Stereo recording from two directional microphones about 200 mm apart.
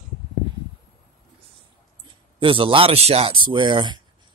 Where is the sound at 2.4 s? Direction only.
25° right (ahead or behind).